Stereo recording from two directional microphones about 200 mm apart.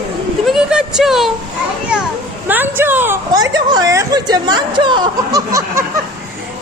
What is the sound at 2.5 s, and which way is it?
A woman's voice, 10° right (ahead or behind).